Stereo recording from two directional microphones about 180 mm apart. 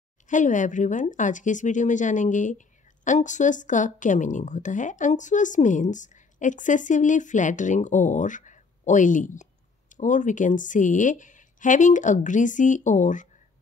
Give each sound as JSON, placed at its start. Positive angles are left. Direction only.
{"t": 0.3, "sound": "speech", "side_deg": 45}